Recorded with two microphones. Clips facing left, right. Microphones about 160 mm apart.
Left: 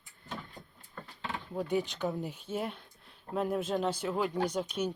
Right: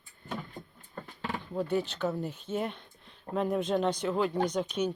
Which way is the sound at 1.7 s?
15° left (ahead or behind).